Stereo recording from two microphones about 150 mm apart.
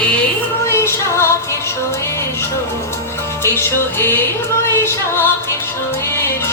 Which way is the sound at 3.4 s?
15° left (ahead or behind).